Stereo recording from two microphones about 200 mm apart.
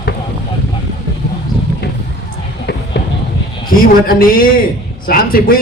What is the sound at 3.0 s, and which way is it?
Music, 55° left (ahead or behind).